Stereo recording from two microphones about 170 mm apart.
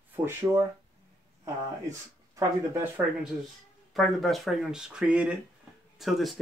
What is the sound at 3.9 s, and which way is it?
Speech, centre (ahead or behind).